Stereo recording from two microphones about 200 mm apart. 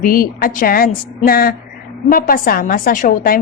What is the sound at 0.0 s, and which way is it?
A woman's voice, 45° left (ahead or behind).